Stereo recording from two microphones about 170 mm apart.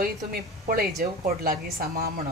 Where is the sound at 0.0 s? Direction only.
60° right (ahead or behind).